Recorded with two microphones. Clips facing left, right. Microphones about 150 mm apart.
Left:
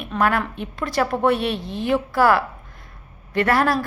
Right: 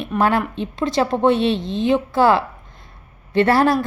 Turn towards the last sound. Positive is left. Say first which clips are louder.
# right 4 dB
turn(degrees=-30)  # may be behind; listen again after turning